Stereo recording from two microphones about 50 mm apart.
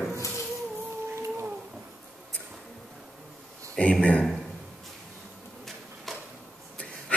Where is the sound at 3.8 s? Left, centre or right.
Left.